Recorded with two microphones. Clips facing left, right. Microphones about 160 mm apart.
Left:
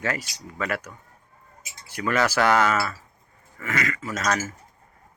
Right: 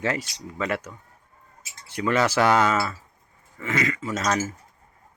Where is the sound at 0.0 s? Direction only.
25° right (ahead or behind).